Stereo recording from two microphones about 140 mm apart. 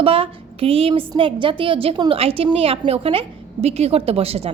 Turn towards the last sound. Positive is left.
turn(degrees=-45)  # may be behind; listen again after turning